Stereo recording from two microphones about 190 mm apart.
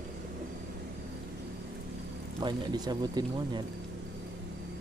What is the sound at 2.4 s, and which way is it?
Speech, 20° right (ahead or behind).